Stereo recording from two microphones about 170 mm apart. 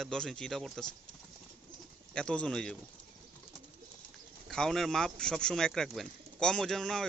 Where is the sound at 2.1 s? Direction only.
5° left (ahead or behind).